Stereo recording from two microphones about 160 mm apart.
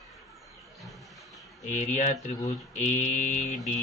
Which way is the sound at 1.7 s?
50° left (ahead or behind).